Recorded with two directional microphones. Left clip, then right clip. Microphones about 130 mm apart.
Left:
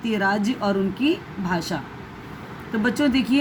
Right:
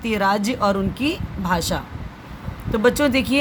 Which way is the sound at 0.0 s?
60° right (ahead or behind).